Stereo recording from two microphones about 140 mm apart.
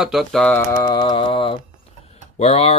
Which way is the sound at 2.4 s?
45° left (ahead or behind).